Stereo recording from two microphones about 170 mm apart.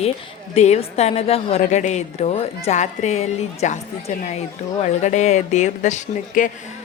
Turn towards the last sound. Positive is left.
turn(degrees=45)  # may be behind; listen again after turning